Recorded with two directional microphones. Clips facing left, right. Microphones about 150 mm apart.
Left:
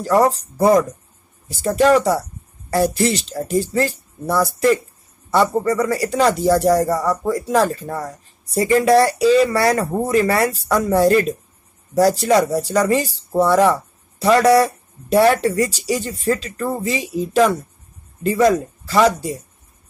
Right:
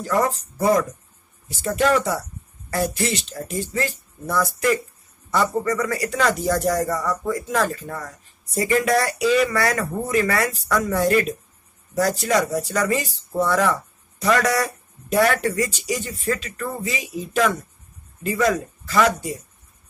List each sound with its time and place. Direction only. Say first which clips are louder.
0.0 s speech: left 6 dB; 35° left (ahead or behind)